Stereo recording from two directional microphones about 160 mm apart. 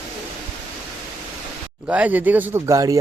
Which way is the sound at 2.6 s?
25° right (ahead or behind).